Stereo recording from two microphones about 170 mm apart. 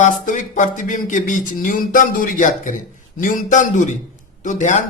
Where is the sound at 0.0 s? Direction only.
50° left (ahead or behind).